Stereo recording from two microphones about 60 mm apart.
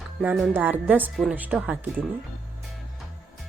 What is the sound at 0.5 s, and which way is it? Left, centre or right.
A woman's voice, right.